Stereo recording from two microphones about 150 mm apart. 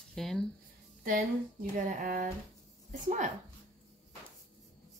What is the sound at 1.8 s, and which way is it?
Speech, 65° right (ahead or behind).